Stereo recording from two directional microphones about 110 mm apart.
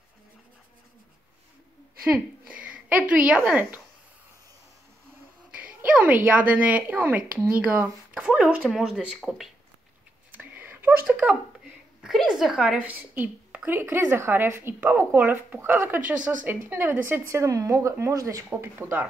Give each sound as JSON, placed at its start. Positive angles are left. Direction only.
{"t": 2.4, "sound": "speech", "side_deg": -10}
{"t": 5.5, "sound": "speech", "side_deg": -10}
{"t": 10.3, "sound": "a sound", "side_deg": -15}
{"t": 12.0, "sound": "a woman's voice", "side_deg": -5}